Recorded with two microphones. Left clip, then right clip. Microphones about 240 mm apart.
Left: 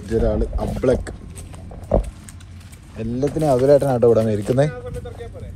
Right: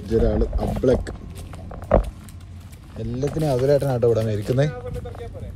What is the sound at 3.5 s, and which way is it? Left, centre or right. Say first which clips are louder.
Speech: left 5 dB; centre.